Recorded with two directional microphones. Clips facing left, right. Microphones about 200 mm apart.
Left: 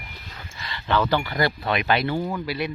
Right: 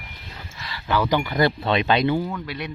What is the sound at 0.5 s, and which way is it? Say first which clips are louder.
Speech: even; centre (ahead or behind).